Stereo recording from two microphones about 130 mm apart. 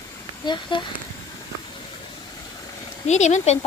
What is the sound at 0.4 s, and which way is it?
Speech, 35° left (ahead or behind).